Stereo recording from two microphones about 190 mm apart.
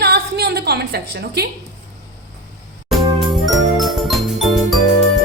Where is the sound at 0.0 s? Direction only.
60° right (ahead or behind).